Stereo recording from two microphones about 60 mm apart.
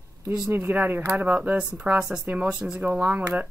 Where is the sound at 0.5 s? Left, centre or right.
Right; by 2.8 s centre.